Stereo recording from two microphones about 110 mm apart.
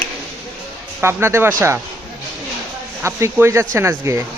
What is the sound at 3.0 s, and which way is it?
Speech, 25° right (ahead or behind).